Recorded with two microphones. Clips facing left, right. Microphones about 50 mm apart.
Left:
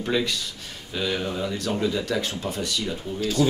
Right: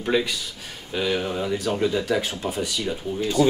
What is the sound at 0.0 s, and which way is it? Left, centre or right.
Speech, centre.